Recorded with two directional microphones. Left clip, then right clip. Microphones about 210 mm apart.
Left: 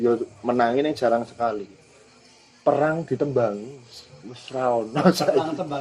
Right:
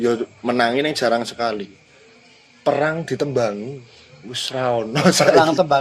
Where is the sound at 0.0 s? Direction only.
25° right (ahead or behind).